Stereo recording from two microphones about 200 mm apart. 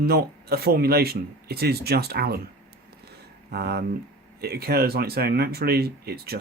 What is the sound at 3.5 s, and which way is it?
Speech, 50° right (ahead or behind).